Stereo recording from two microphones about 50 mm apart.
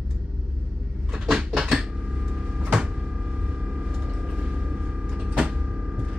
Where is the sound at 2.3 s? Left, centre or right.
Centre.